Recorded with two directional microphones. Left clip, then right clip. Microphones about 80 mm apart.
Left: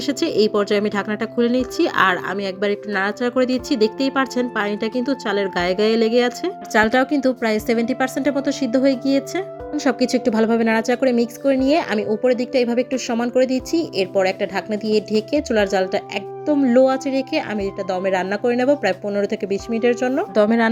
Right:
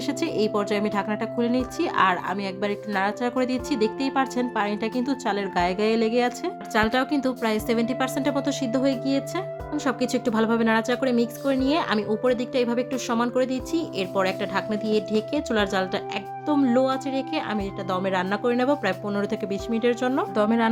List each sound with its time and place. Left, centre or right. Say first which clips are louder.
0.0 s speech: left 6 dB; left
6.7 s a woman's voice: left 6 dB; left
11.9 s speech: left 5 dB; centre
14.2 s speech: left 4 dB; centre
15.4 s a woman's voice: left 6 dB; left
18.1 s speech: left 4 dB; left
20.3 s a woman's voice: left 8 dB; left